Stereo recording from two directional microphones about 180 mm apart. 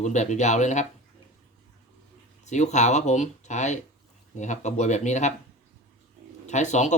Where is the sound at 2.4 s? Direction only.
40° left (ahead or behind).